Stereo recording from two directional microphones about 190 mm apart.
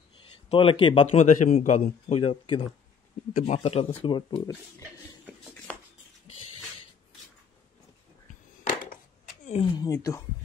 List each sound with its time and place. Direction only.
0.5 s speech: 30° left (ahead or behind)
1.1 s speech: 40° left (ahead or behind)
9.5 s speech: 30° left (ahead or behind)
9.8 s speech: 15° left (ahead or behind)